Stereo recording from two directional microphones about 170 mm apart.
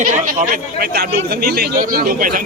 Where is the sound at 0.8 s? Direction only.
65° right (ahead or behind).